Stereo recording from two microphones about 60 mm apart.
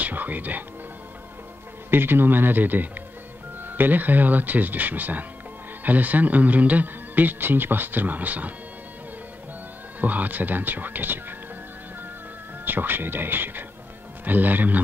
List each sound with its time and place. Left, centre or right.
0.0 s speech: right
1.9 s speech: right
9.9 s speech: right
12.6 s speech: right